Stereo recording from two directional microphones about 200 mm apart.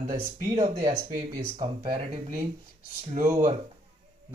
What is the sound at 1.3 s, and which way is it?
Speech, 20° right (ahead or behind).